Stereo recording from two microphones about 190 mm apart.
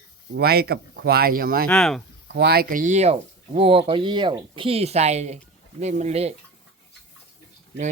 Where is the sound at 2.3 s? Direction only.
60° right (ahead or behind); by 6.3 s 35° right (ahead or behind).